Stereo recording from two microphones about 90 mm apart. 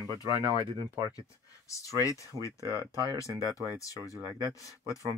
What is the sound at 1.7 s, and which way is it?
Speech, 35° left (ahead or behind).